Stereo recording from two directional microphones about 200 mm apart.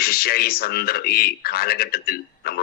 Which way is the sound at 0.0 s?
50° left (ahead or behind).